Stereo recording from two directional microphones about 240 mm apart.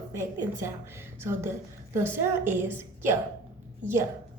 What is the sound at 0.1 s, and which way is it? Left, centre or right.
A woman's voice, centre.